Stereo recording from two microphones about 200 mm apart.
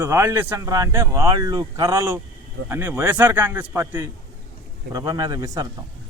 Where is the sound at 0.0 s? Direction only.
10° right (ahead or behind).